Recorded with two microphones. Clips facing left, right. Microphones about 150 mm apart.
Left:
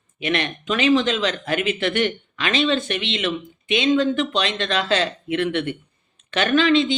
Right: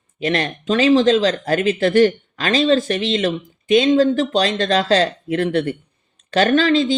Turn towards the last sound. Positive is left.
turn(degrees=-45)  # may be behind; listen again after turning